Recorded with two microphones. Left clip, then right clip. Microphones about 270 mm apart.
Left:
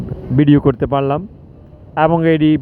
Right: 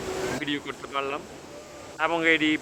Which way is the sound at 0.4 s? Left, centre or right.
Left.